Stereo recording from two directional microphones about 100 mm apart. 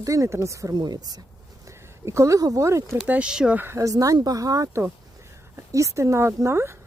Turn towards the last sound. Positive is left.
turn(degrees=-25)  # may be behind; listen again after turning